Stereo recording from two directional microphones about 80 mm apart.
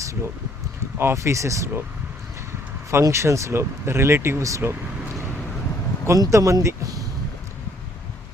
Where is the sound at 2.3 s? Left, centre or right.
Right.